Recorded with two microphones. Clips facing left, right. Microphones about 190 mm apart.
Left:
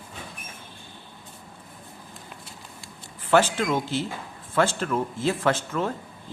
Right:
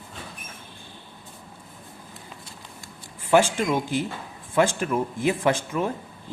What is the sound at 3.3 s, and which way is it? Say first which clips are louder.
Speech: right 1 dB; 10° right (ahead or behind).